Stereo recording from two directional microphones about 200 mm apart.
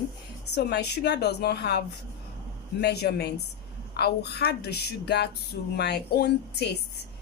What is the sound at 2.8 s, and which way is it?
A woman's voice, 55° left (ahead or behind).